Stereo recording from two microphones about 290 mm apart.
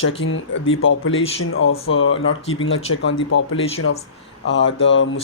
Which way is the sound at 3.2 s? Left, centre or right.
Left.